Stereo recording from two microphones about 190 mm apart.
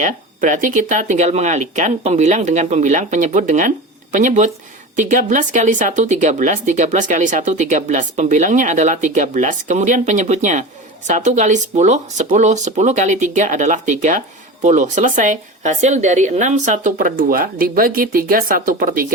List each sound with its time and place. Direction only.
0.0 s speech: 40° right (ahead or behind)